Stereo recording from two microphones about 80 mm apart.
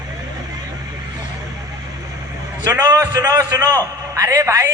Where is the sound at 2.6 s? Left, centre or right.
Right.